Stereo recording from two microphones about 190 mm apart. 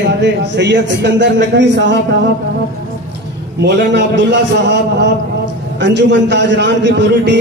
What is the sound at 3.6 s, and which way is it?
A man's voice, 65° right (ahead or behind).